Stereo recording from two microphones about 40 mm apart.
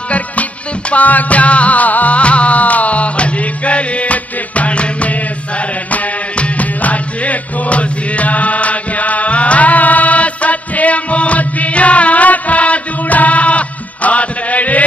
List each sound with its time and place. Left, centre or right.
0.1 s music: left